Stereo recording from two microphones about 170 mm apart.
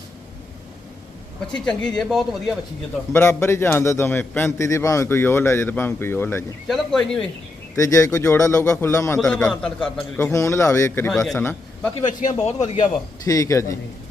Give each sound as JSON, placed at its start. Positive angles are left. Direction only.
{"t": 2.0, "sound": "a man's voice", "side_deg": 0}
{"t": 3.1, "sound": "a man's voice", "side_deg": 15}
{"t": 6.7, "sound": "a man's voice", "side_deg": 5}
{"t": 7.8, "sound": "a man's voice", "side_deg": 20}
{"t": 10.3, "sound": "a man's voice", "side_deg": 15}
{"t": 11.1, "sound": "a man's voice", "side_deg": 0}
{"t": 11.9, "sound": "speech", "side_deg": 45}
{"t": 13.2, "sound": "a man's voice", "side_deg": 20}